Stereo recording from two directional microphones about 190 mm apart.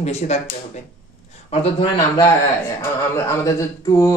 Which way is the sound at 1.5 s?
25° left (ahead or behind).